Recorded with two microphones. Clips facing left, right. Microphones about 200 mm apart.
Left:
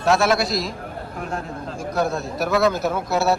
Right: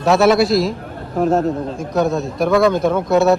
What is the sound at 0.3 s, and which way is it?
Speech, centre (ahead or behind).